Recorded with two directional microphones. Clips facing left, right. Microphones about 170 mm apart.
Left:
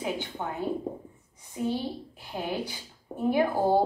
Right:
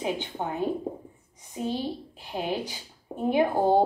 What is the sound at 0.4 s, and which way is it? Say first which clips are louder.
Speech: right 4 dB; 30° right (ahead or behind).